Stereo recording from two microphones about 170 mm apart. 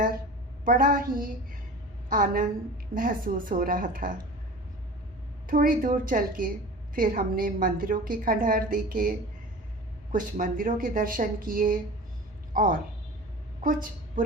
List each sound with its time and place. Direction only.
0.6 s a woman's voice: 55° right (ahead or behind)
5.5 s a woman's voice: 55° right (ahead or behind)